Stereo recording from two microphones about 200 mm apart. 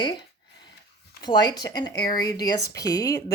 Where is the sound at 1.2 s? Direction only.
20° left (ahead or behind).